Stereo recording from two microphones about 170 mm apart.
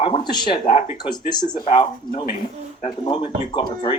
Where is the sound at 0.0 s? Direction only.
30° left (ahead or behind).